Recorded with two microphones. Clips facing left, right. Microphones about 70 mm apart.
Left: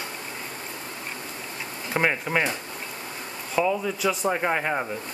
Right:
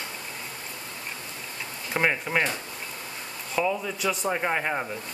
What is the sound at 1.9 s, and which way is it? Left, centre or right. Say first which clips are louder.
Speech: left 1 dB; centre.